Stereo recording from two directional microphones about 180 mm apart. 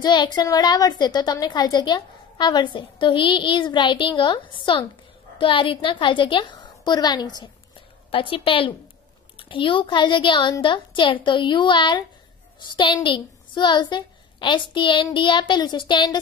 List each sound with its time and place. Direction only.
0.0 s a woman's voice: 25° left (ahead or behind)